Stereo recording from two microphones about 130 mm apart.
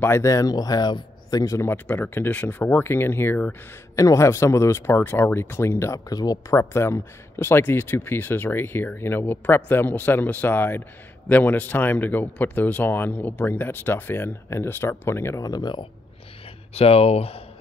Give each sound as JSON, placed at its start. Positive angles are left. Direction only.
{"t": 0.0, "sound": "speech", "side_deg": 20}
{"t": 16.7, "sound": "speech", "side_deg": 50}